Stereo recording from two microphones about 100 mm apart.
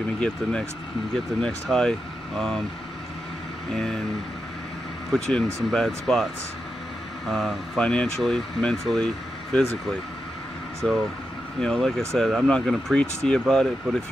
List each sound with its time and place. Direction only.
0.2 s speech: 10° left (ahead or behind)
3.7 s speech: 5° left (ahead or behind)
5.1 s speech: 5° left (ahead or behind)
7.2 s speech: centre (ahead or behind)
10.8 s speech: 5° left (ahead or behind)
12.2 s speech: 5° right (ahead or behind)